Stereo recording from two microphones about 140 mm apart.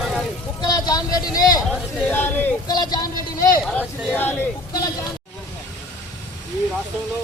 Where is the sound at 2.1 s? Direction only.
15° left (ahead or behind).